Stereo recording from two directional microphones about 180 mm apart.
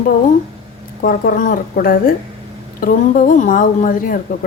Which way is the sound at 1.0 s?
50° left (ahead or behind).